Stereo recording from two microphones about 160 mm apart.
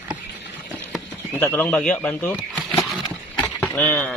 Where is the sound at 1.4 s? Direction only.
15° left (ahead or behind).